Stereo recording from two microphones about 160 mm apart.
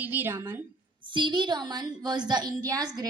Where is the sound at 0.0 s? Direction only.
10° right (ahead or behind).